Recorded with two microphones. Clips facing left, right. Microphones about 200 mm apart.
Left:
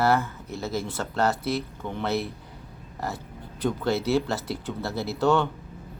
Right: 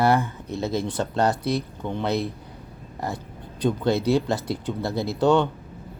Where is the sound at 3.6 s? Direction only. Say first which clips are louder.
Right 3 dB; 15° right (ahead or behind).